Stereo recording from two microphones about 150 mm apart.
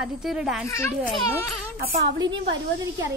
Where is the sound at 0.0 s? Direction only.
5° right (ahead or behind).